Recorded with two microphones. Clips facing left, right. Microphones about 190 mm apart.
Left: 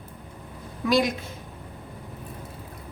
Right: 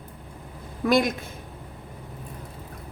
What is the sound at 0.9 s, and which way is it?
Speech, 55° right (ahead or behind).